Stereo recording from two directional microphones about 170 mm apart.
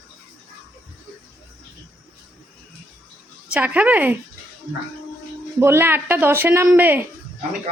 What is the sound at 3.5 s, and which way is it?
Speech, 10° right (ahead or behind).